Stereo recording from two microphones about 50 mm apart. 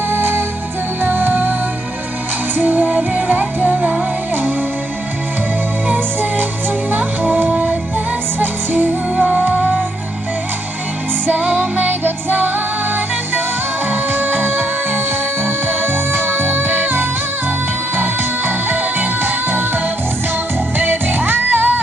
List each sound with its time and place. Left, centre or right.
0.1 s music: right
2.5 s music: right
6.9 s music: right
9.1 s music: right
11.2 s music: right
20.7 s music: right